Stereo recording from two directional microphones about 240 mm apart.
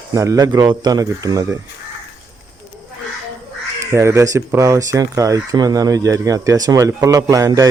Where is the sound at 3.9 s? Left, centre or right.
Centre.